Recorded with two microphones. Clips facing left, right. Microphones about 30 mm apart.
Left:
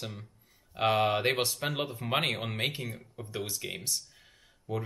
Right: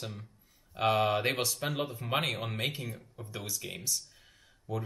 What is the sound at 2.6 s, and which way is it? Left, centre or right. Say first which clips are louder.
Speech: left 2 dB; left.